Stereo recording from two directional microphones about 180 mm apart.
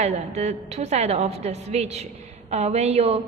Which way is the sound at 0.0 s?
35° right (ahead or behind).